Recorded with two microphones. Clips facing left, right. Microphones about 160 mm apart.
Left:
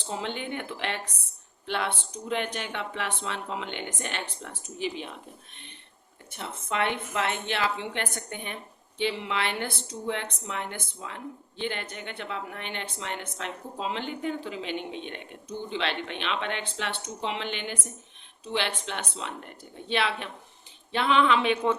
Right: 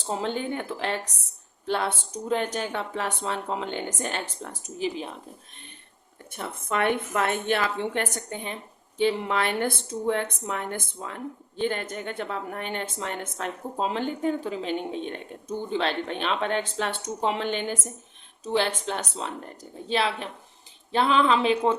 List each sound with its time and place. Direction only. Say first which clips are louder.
0.0 s speech: right 5 dB; 40° right (ahead or behind)
6.3 s a woman's voice: right 3 dB; 50° right (ahead or behind); by 8.5 s 35° right (ahead or behind)
9.0 s a woman's voice: right 5 dB; 45° right (ahead or behind)